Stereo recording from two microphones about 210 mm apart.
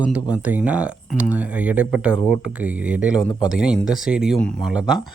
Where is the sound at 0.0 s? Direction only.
5° right (ahead or behind).